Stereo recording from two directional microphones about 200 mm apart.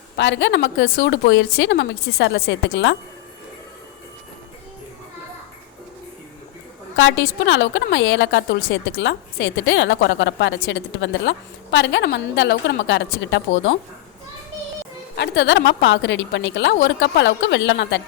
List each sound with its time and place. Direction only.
0.2 s a woman's voice: 65° left (ahead or behind)
6.9 s a woman's voice: 65° left (ahead or behind)
15.1 s a woman's voice: 60° left (ahead or behind)